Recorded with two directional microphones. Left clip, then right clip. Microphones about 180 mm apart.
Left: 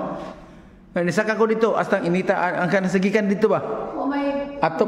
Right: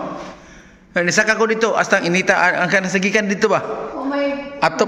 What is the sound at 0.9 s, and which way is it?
A man's voice, 15° left (ahead or behind).